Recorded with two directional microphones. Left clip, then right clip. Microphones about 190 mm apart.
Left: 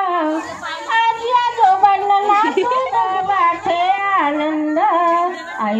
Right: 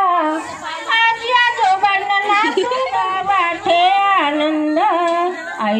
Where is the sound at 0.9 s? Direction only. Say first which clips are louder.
Right 1 dB; 50° left (ahead or behind).